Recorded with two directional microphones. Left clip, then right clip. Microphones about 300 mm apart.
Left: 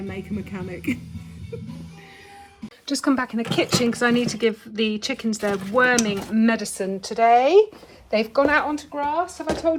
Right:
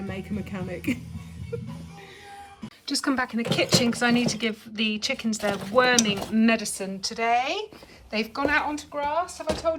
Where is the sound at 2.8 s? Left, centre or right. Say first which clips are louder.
Left 3 dB; centre.